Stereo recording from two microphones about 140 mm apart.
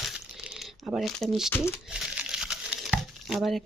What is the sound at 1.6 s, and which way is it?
Crumpling, 5° right (ahead or behind).